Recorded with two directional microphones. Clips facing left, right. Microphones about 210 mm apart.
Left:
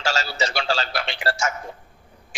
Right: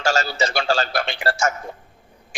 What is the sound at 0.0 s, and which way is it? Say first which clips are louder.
A man's voice: right 4 dB; 50° right (ahead or behind).